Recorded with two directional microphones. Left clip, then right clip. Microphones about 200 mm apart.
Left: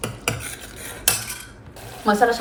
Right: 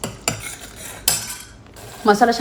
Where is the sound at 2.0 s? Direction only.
40° right (ahead or behind).